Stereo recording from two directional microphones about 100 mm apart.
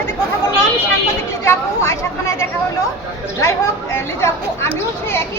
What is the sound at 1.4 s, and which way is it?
A woman's voice, 25° left (ahead or behind).